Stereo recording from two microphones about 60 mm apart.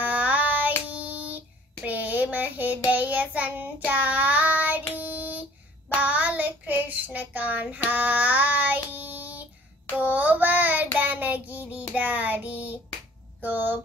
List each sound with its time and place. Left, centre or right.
0.0 s child singing: right
1.9 s a sound: right
2.9 s child singing: right
13.4 s speech: right